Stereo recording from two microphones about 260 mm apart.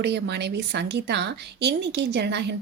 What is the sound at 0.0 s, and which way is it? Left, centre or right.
A woman's voice, right.